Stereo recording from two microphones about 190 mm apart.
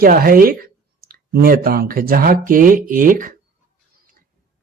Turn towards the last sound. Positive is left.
turn(degrees=-45)  # may be behind; listen again after turning